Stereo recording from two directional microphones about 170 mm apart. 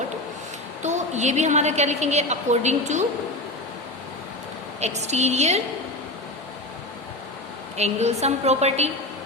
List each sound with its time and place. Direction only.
0.8 s a woman's voice: 45° right (ahead or behind)
4.8 s a woman's voice: 40° right (ahead or behind)
7.8 s a woman's voice: 40° right (ahead or behind)